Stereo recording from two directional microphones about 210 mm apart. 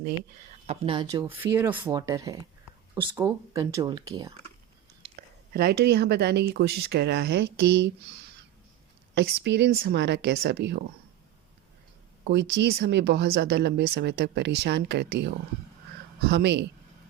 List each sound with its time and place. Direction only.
0.7 s speech: 25° right (ahead or behind)
5.0 s whispering: 25° right (ahead or behind)
5.5 s speech: 50° right (ahead or behind)
9.1 s speech: 50° right (ahead or behind)
12.2 s speech: 50° right (ahead or behind)